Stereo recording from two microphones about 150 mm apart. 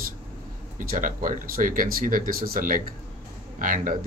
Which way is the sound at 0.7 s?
65° right (ahead or behind).